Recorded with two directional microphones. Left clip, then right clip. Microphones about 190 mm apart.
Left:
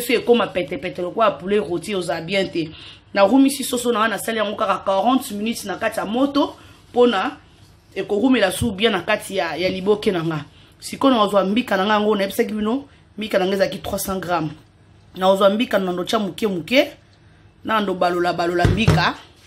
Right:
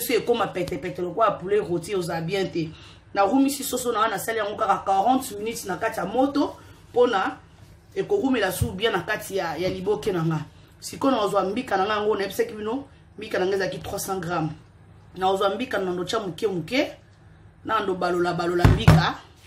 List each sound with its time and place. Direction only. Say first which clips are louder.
0.1 s speech: left 6 dB; 40° left (ahead or behind)
7.9 s speech: left 4 dB; 45° left (ahead or behind)